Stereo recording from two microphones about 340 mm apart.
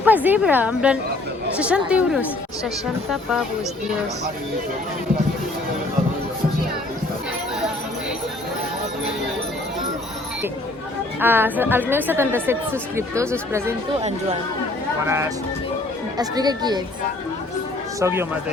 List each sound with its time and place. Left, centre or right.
0.0 s a woman's voice: centre
11.2 s speech: centre
15.0 s speech: centre
18.0 s speech: centre